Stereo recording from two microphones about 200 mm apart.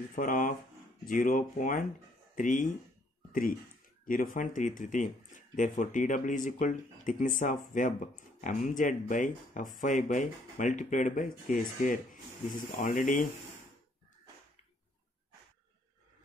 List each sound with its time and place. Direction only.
0.1 s speech: 40° left (ahead or behind)
4.0 s speech: 45° left (ahead or behind)